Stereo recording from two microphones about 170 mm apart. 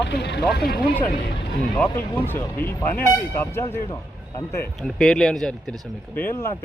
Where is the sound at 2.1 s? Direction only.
15° left (ahead or behind).